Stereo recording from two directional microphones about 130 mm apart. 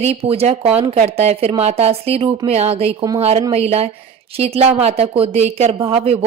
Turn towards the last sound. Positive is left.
turn(degrees=-50)  # may be behind; listen again after turning